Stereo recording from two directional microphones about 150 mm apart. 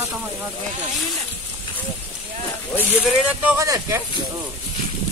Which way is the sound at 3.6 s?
20° right (ahead or behind).